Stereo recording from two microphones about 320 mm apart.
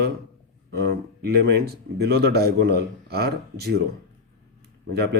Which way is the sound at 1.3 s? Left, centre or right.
Right.